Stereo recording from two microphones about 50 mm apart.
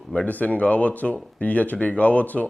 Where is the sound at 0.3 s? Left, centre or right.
Left.